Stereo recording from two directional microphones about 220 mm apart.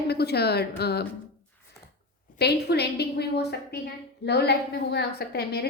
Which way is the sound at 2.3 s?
45° left (ahead or behind).